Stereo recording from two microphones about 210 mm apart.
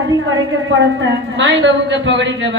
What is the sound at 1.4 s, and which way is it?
Speech, 60° right (ahead or behind).